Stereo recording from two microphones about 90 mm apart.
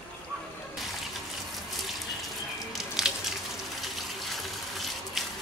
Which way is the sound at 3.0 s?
5° right (ahead or behind).